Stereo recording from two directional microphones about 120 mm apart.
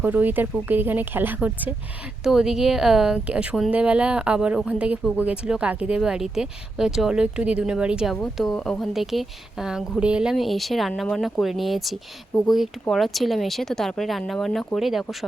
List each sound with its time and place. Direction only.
0.0 s a woman's voice: 15° right (ahead or behind)
8.1 s speech: 5° left (ahead or behind)